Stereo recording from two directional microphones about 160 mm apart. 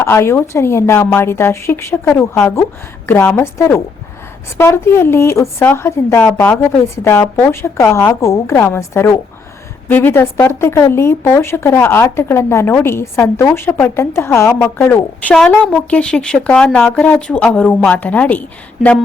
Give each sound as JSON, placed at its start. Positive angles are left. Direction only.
{"t": 0.0, "sound": "speech", "side_deg": 15}